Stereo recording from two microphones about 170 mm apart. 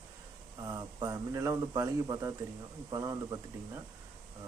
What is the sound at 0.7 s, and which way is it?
Speech, 20° right (ahead or behind).